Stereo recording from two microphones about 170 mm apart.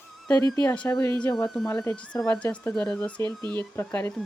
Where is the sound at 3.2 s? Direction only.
25° right (ahead or behind).